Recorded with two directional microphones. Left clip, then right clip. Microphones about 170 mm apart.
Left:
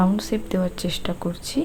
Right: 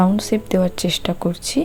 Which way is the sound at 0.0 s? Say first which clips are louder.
Right 5 dB; 30° right (ahead or behind).